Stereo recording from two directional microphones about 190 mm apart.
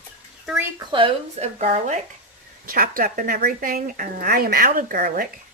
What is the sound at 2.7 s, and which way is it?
Speech, 50° right (ahead or behind).